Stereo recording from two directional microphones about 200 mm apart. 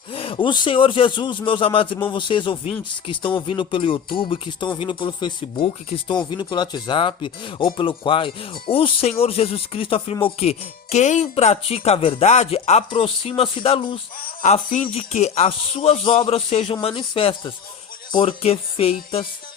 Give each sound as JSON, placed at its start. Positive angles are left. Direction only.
{"t": 0.1, "sound": "speech", "side_deg": 25}
{"t": 14.4, "sound": "speech", "side_deg": 35}